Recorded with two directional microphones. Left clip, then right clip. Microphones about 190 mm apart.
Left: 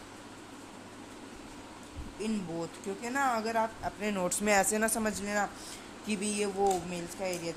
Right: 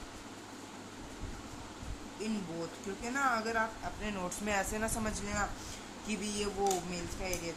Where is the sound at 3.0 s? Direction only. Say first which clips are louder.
Left 2 dB; 30° left (ahead or behind).